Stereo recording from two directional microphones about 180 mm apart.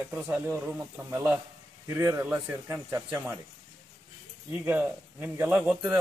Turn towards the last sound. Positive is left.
turn(degrees=-5)  # may be behind; listen again after turning